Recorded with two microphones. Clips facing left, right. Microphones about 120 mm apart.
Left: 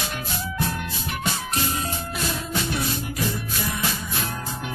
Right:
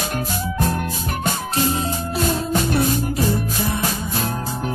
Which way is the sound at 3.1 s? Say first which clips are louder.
Right 7 dB; 30° right (ahead or behind).